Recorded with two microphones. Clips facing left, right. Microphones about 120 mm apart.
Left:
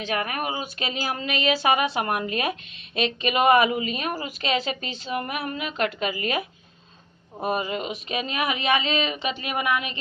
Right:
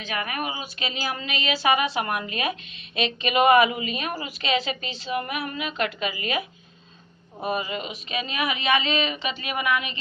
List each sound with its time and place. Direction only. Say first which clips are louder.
0.1 s a woman's voice: left 1 dB; 45° left (ahead or behind)
7.4 s speech: left 2 dB; 45° left (ahead or behind)